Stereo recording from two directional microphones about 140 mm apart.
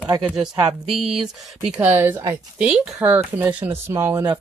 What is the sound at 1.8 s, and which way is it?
Speech, 15° right (ahead or behind).